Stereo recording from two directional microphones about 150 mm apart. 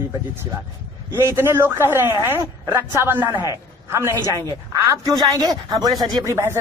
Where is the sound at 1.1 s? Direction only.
15° right (ahead or behind).